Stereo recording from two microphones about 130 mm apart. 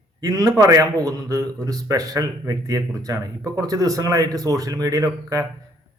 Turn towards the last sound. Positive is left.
turn(degrees=-25)  # may be behind; listen again after turning